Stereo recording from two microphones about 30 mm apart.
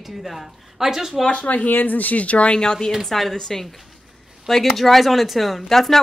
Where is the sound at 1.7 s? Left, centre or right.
Left.